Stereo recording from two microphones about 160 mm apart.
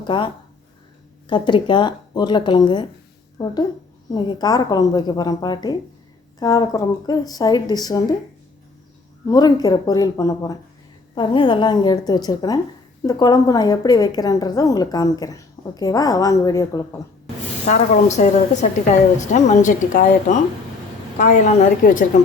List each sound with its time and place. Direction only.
0.0 s speech: 30° left (ahead or behind)
1.3 s a woman's voice: 30° left (ahead or behind)
9.2 s a woman's voice: 25° left (ahead or behind)
17.7 s speech: 50° left (ahead or behind)